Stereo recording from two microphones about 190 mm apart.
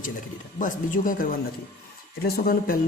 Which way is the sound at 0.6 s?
45° left (ahead or behind).